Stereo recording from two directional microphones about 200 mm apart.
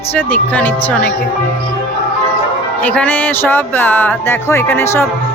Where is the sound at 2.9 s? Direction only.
10° left (ahead or behind).